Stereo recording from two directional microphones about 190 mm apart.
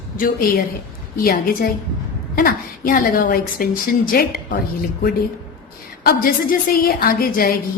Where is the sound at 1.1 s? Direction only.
50° left (ahead or behind).